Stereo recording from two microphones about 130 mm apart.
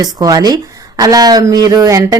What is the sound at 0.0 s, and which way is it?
Speech, 30° right (ahead or behind).